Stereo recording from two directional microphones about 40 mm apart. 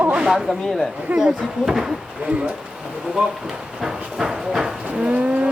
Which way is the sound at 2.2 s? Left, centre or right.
Right.